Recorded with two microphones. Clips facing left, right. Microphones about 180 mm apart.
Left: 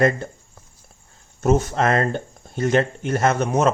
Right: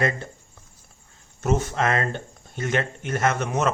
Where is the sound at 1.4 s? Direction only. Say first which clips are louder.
Left 5 dB; 40° left (ahead or behind).